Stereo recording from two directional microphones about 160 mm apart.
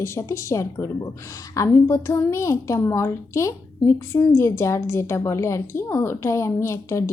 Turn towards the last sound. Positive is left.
turn(degrees=20)  # may be behind; listen again after turning